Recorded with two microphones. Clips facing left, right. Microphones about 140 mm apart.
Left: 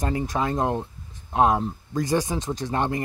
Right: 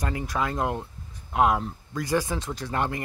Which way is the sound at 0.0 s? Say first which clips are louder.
Left 3 dB; 25° left (ahead or behind).